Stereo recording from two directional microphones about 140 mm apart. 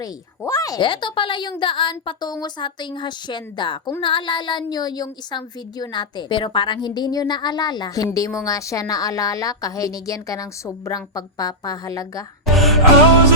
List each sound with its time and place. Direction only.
0.0 s speech: 25° left (ahead or behind)
0.8 s a woman's voice: 35° left (ahead or behind)
12.5 s music: centre (ahead or behind)